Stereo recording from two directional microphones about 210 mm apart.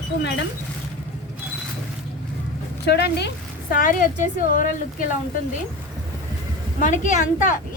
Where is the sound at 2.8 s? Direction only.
50° left (ahead or behind).